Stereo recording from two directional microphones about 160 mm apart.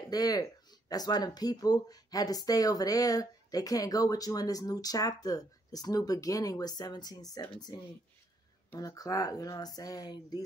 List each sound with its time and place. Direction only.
0.1 s speech: 25° left (ahead or behind)
8.6 s speech: 20° left (ahead or behind)